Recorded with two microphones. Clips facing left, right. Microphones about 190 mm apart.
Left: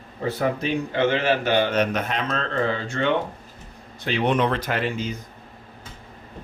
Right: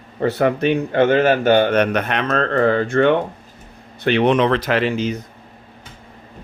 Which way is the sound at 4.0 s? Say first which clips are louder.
Right 6 dB; 70° right (ahead or behind).